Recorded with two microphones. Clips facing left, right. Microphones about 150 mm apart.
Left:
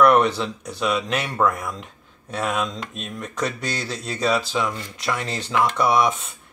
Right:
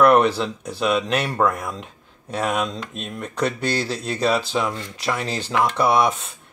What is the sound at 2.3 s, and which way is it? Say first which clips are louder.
Speech: right 2 dB; 30° right (ahead or behind).